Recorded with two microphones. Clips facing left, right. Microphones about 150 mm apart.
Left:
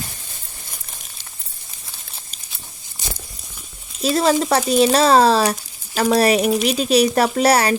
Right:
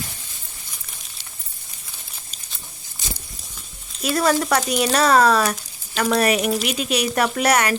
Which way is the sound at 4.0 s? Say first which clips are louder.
Left 3 dB; 25° left (ahead or behind).